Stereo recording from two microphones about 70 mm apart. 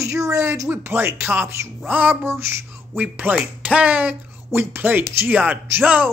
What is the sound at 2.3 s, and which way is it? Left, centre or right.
Speech, right.